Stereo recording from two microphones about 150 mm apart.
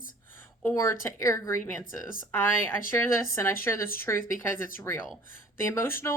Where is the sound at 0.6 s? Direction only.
15° left (ahead or behind).